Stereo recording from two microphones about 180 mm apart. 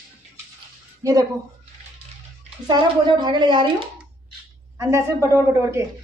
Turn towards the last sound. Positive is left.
turn(degrees=-15)  # may be behind; listen again after turning